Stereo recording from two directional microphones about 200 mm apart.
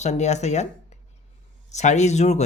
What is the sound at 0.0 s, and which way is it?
Speech, 35° left (ahead or behind).